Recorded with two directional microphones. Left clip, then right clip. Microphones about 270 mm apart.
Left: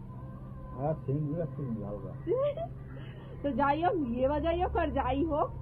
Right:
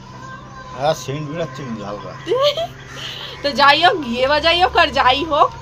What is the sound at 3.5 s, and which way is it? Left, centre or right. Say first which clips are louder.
A woman's voice: right 16 dB; centre.